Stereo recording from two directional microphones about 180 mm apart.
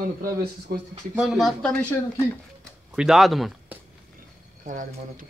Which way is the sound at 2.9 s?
5° right (ahead or behind).